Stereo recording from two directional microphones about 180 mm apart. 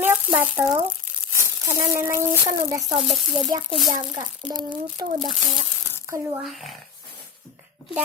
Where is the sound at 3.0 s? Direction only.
Centre (ahead or behind).